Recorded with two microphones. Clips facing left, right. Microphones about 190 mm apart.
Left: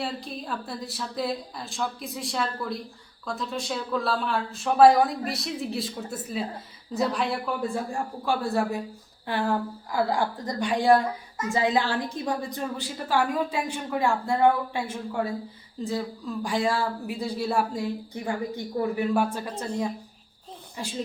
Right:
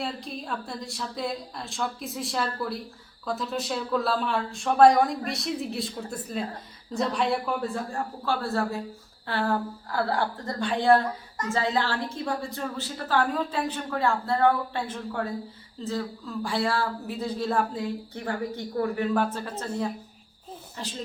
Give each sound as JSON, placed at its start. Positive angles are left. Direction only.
{"t": 0.0, "sound": "speech", "side_deg": 0}
{"t": 7.7, "sound": "a woman's voice", "side_deg": 15}
{"t": 20.8, "sound": "a woman's voice", "side_deg": 10}